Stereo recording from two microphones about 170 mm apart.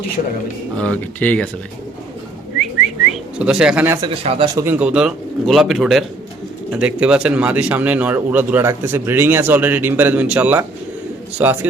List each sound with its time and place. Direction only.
0.8 s speech: 10° left (ahead or behind)
3.1 s speech: 5° right (ahead or behind)
4.2 s speech: 35° right (ahead or behind)
4.5 s speech: 15° right (ahead or behind)